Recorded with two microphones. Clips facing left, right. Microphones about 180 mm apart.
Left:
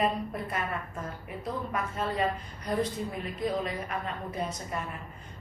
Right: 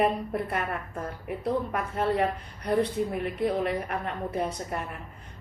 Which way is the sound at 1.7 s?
65° right (ahead or behind).